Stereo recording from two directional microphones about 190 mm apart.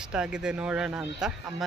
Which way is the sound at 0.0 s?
5° right (ahead or behind).